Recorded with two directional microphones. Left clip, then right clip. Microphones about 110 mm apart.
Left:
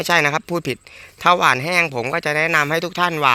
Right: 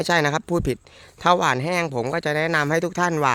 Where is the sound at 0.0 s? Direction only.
40° right (ahead or behind).